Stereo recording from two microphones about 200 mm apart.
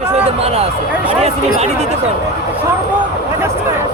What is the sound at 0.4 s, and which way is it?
Speech, 30° right (ahead or behind).